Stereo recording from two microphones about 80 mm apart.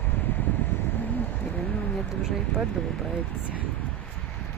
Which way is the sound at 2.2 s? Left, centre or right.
Centre.